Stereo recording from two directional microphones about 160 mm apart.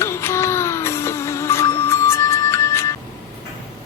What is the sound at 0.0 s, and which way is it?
Music, 15° left (ahead or behind).